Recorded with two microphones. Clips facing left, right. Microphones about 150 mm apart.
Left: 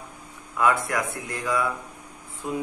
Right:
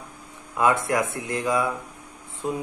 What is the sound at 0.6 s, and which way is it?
Speech, 20° right (ahead or behind).